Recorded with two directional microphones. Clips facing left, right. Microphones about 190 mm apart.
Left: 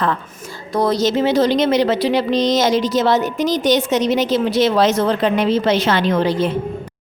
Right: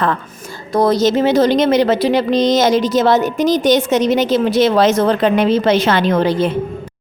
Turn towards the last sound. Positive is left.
turn(degrees=-55)  # may be behind; listen again after turning